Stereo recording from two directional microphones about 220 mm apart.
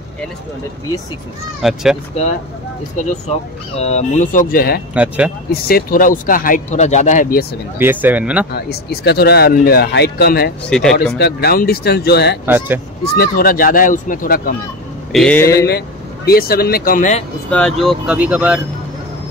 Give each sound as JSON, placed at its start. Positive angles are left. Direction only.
{"t": 1.6, "sound": "speech", "side_deg": 0}
{"t": 3.0, "sound": "speech", "side_deg": 30}
{"t": 4.9, "sound": "speech", "side_deg": -5}
{"t": 5.5, "sound": "speech", "side_deg": 45}
{"t": 7.8, "sound": "speech", "side_deg": -10}
{"t": 8.5, "sound": "speech", "side_deg": 45}
{"t": 10.7, "sound": "speech", "side_deg": 5}
{"t": 11.1, "sound": "speech", "side_deg": 45}
{"t": 12.4, "sound": "speech", "side_deg": -10}
{"t": 13.1, "sound": "speech", "side_deg": 45}
{"t": 15.1, "sound": "speech", "side_deg": 5}
{"t": 16.3, "sound": "speech", "side_deg": 45}
{"t": 17.5, "sound": "speech", "side_deg": 5}